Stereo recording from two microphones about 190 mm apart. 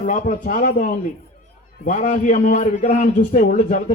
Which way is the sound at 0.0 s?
45° left (ahead or behind).